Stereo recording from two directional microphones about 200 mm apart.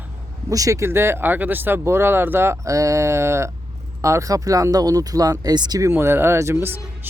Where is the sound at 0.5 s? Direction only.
15° right (ahead or behind).